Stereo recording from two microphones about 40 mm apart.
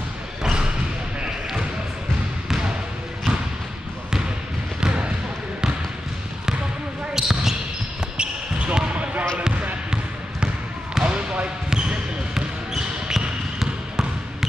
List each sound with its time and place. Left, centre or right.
0.4 s a sound: centre
4.7 s basketball bounce: right
7.2 s basketball bounce: centre
8.2 s a sound: right
11.0 s basketball bounce: right
11.7 s basketball bounce: centre